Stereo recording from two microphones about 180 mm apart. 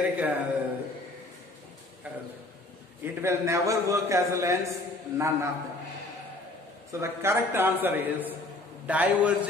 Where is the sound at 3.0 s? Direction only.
15° right (ahead or behind).